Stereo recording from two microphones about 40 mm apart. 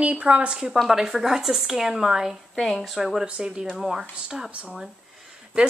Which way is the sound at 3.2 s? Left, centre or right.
Right.